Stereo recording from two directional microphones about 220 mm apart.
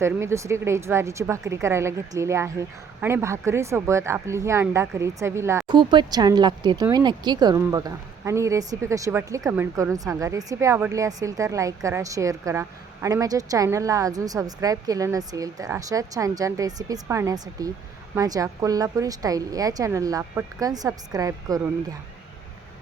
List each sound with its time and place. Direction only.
0.0 s a woman's voice: 10° right (ahead or behind)